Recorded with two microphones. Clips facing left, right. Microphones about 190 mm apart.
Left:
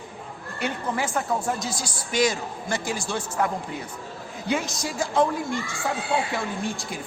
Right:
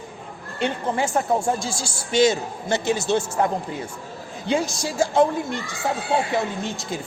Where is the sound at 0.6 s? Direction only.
25° right (ahead or behind).